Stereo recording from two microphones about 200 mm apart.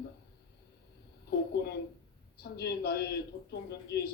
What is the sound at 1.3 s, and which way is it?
A woman's voice, 55° left (ahead or behind).